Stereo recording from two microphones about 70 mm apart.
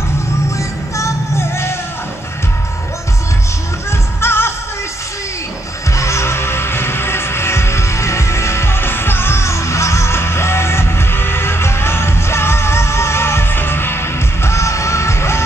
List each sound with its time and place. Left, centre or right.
0.6 s music: left
4.2 s music: left
5.9 s music: left